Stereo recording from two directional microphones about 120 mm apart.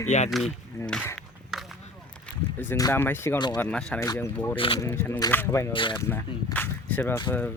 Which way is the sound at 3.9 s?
30° left (ahead or behind).